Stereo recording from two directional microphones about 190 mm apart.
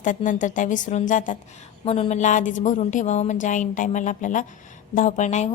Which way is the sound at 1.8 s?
30° left (ahead or behind).